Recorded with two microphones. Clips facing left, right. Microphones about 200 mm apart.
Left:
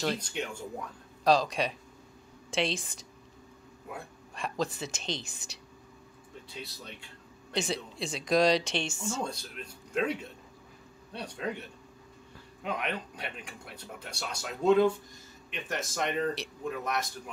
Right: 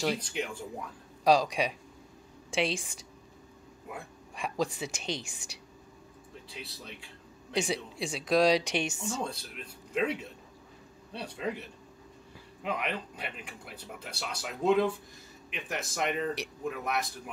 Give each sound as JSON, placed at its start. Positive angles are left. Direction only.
{"t": 0.0, "sound": "speech", "side_deg": -5}
{"t": 6.8, "sound": "speech", "side_deg": 0}
{"t": 9.2, "sound": "speech", "side_deg": -5}
{"t": 11.1, "sound": "speech", "side_deg": -5}
{"t": 12.6, "sound": "speech", "side_deg": 0}